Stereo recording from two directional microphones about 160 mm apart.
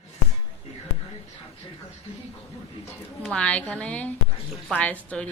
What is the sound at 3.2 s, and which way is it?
A woman's voice, 5° left (ahead or behind).